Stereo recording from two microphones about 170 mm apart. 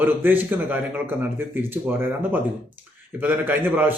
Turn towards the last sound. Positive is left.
turn(degrees=-10)  # may be behind; listen again after turning